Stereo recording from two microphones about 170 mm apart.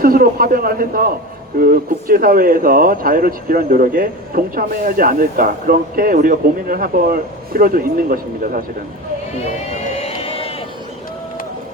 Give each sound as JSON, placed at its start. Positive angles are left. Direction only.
{"t": 0.0, "sound": "speech", "side_deg": -60}
{"t": 9.4, "sound": "crowd", "side_deg": 40}